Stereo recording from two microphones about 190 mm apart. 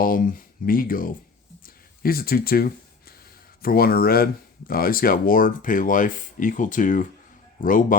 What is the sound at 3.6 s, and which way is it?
Speech, 50° left (ahead or behind).